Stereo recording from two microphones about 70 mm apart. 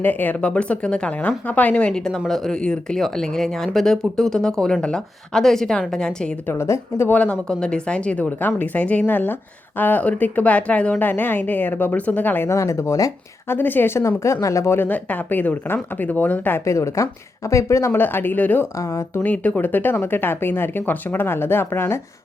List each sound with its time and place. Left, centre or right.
0.0 s speech: left
1.9 s speech: centre
6.5 s a woman's voice: left
7.1 s speech: centre
12.5 s speech: left
13.5 s a woman's voice: left
14.3 s speech: left
14.8 s speech: left
16.6 s speech: left
17.9 s speech: left
18.6 s a woman's voice: left
19.2 s speech: left